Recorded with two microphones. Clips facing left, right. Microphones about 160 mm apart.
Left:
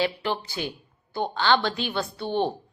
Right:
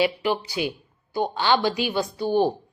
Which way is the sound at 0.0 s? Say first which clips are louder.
Right 4 dB; 10° right (ahead or behind).